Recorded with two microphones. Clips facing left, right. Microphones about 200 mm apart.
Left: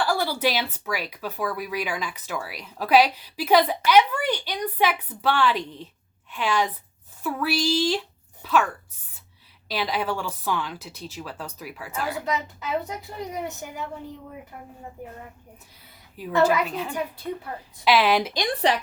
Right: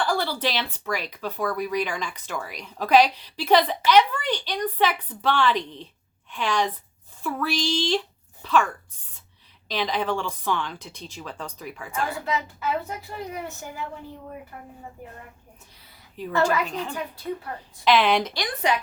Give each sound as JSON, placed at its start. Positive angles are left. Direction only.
{"t": 0.0, "sound": "speech", "side_deg": 10}
{"t": 9.6, "sound": "speech", "side_deg": 5}
{"t": 12.2, "sound": "speech", "side_deg": 20}
{"t": 16.2, "sound": "a woman's voice", "side_deg": 10}